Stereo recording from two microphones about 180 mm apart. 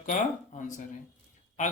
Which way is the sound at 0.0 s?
45° left (ahead or behind).